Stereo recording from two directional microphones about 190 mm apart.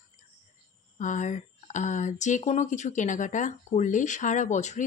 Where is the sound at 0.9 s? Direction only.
40° left (ahead or behind).